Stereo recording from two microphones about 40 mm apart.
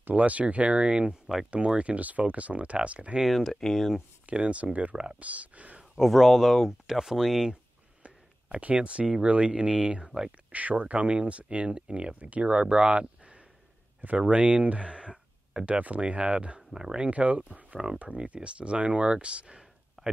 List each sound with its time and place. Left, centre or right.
0.1 s speech: right
1.2 s speech: centre
1.8 s speech: right
3.3 s speech: centre
4.3 s speech: right
5.9 s speech: centre
8.0 s a sound: right
9.2 s speech: right
10.0 s speech: centre
10.5 s speech: right
16.5 s speech: centre
17.0 s speech: right
20.0 s a sound: centre